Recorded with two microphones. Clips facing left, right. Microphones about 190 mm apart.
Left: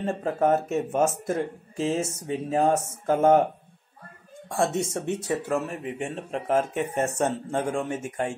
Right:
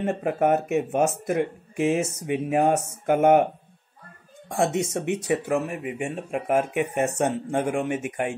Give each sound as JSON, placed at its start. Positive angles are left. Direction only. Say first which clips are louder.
{"t": 0.0, "sound": "speech", "louder": "right 1 dB", "side_deg": -15}
{"t": 4.5, "sound": "speech", "louder": "right 2 dB", "side_deg": -15}